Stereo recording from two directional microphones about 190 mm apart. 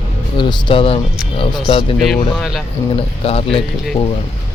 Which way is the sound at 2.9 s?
30° left (ahead or behind).